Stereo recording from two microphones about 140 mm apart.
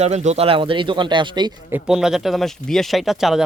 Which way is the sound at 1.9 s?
5° right (ahead or behind).